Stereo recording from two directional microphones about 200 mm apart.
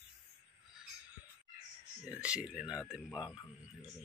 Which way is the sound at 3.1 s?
20° left (ahead or behind).